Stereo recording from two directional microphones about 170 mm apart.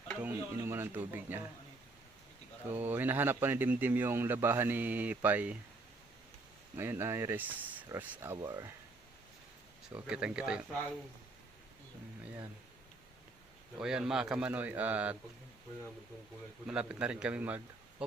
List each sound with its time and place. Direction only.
0.2 s speech: 15° right (ahead or behind)
2.6 s speech: 10° right (ahead or behind)
6.7 s speech: 15° right (ahead or behind)
9.9 s speech: 5° right (ahead or behind)
13.7 s speech: 5° right (ahead or behind)
16.6 s speech: 5° right (ahead or behind)